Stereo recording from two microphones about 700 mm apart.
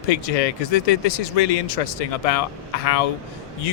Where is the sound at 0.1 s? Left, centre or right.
Left.